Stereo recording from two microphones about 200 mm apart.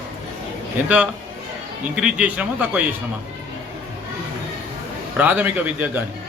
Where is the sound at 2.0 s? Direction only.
5° right (ahead or behind).